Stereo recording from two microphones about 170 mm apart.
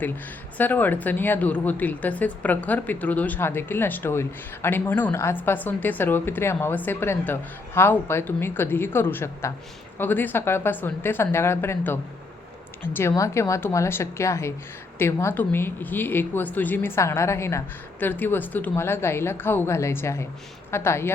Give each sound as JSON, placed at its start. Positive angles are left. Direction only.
{"t": 0.5, "sound": "a woman's voice", "side_deg": 10}